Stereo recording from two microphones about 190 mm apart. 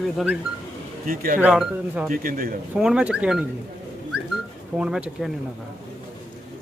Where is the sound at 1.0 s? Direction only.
50° right (ahead or behind).